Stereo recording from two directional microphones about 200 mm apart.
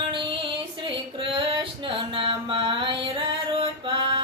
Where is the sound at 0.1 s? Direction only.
25° right (ahead or behind).